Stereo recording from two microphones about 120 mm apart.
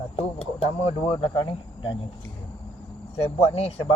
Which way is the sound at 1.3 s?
40° left (ahead or behind).